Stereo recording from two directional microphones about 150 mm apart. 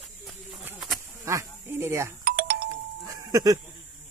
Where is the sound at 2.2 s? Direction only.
65° right (ahead or behind).